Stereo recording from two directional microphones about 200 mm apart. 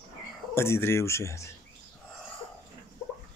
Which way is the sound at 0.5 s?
10° left (ahead or behind).